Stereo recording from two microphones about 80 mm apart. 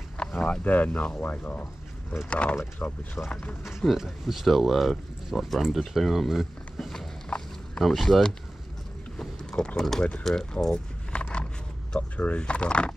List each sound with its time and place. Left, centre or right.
0.2 s a sound: centre
0.7 s speech: centre
3.2 s speech: left
3.6 s speech: centre
9.2 s boat: centre
10.2 s a sound: centre
11.9 s speech: centre